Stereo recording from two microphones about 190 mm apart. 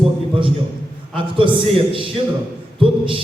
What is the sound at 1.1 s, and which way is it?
Speech, 25° right (ahead or behind).